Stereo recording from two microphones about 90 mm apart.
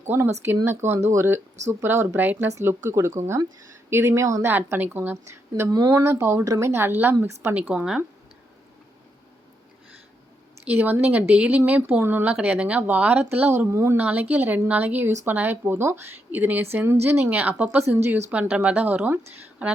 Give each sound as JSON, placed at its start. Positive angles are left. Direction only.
{"t": 0.0, "sound": "speech", "side_deg": -25}
{"t": 2.6, "sound": "a woman's voice", "side_deg": -30}
{"t": 4.5, "sound": "speech", "side_deg": -20}
{"t": 5.1, "sound": "a woman's voice", "side_deg": -35}
{"t": 7.7, "sound": "speech", "side_deg": -10}
{"t": 10.7, "sound": "speech", "side_deg": -20}
{"t": 13.7, "sound": "a woman's voice", "side_deg": -30}
{"t": 14.0, "sound": "speech", "side_deg": -20}
{"t": 17.8, "sound": "a woman's voice", "side_deg": -30}
{"t": 18.3, "sound": "speech", "side_deg": -15}